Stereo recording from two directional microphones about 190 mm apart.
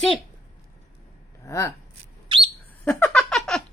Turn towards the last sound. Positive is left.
turn(degrees=5)  # may be behind; listen again after turning